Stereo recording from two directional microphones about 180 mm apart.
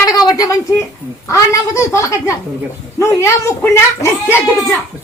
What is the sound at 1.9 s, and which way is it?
Speech, 15° left (ahead or behind).